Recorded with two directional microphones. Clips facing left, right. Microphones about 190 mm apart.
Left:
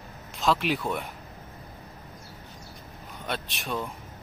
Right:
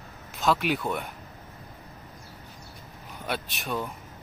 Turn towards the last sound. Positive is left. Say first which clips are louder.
# right 1 dB
turn(degrees=0)  # may be behind; listen again after turning